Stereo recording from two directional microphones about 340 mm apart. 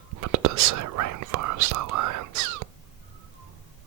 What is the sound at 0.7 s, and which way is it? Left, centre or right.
Speech, right.